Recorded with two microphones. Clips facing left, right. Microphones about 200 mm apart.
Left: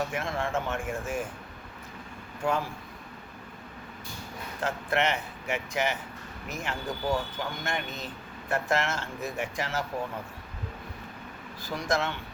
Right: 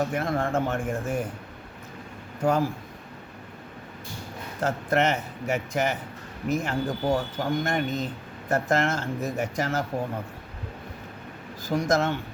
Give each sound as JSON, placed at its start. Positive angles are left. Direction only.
{"t": 0.0, "sound": "speech", "side_deg": -40}
{"t": 2.4, "sound": "speech", "side_deg": -40}
{"t": 4.6, "sound": "speech", "side_deg": -40}
{"t": 11.6, "sound": "speech", "side_deg": -45}